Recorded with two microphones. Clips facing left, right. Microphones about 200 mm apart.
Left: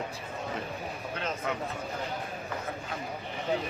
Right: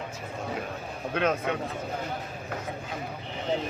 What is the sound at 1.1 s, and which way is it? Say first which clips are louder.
Speech: right 10 dB; 60° right (ahead or behind).